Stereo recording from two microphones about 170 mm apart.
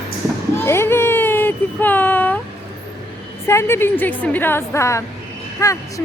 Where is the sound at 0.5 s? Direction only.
15° left (ahead or behind).